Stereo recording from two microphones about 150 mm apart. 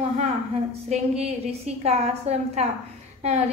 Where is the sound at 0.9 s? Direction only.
45° right (ahead or behind).